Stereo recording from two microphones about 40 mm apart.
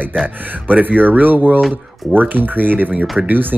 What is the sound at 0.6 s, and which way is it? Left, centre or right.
Speech, right.